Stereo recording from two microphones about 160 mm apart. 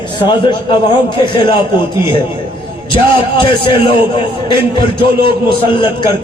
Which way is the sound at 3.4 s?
35° left (ahead or behind).